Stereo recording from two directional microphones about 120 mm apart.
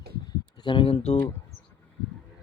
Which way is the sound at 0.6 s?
45° left (ahead or behind).